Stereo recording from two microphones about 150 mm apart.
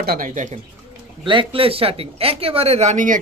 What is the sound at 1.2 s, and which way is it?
Speech, 35° right (ahead or behind).